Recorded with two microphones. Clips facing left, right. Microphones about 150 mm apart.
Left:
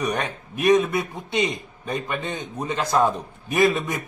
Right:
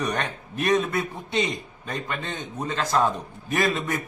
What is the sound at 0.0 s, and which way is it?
A man's voice, 10° left (ahead or behind).